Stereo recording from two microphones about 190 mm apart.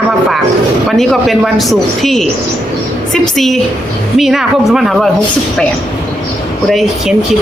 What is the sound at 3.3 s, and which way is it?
Speech, centre (ahead or behind).